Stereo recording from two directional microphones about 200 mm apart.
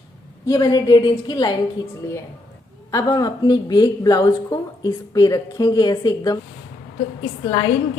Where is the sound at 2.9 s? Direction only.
15° left (ahead or behind).